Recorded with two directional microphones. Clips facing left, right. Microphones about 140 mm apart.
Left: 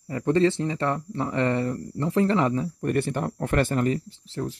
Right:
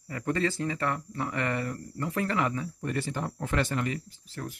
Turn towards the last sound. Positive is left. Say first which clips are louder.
# left 8 dB
turn(degrees=25)  # may be behind; listen again after turning